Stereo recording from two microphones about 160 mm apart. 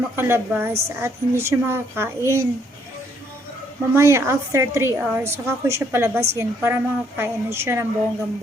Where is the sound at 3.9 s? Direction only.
15° right (ahead or behind).